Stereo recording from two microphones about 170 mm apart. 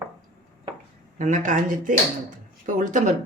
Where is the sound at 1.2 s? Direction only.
45° right (ahead or behind).